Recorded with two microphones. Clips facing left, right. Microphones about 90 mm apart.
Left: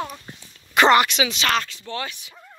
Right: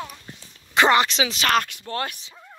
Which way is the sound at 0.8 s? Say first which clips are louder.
Left 2 dB; 15° right (ahead or behind).